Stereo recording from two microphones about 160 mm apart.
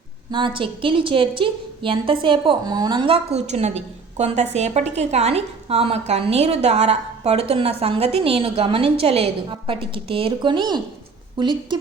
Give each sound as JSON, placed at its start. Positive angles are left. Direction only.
{"t": 0.3, "sound": "a woman's voice", "side_deg": -30}